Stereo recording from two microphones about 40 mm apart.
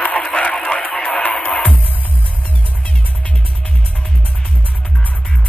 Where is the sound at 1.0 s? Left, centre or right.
Centre.